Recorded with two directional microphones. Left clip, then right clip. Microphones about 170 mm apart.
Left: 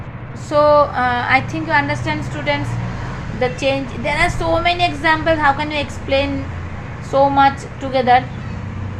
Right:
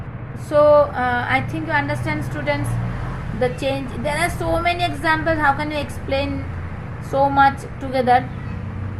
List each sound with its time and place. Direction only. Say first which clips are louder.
0.5 s a woman's voice: left 1 dB; 15° right (ahead or behind)